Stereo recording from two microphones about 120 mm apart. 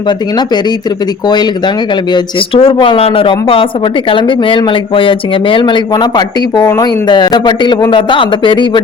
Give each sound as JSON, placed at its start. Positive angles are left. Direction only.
{"t": 1.3, "sound": "a man's voice", "side_deg": 35}
{"t": 2.1, "sound": "a man's voice", "side_deg": 50}